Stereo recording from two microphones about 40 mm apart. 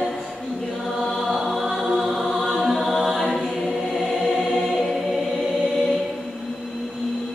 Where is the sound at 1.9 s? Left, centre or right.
Centre.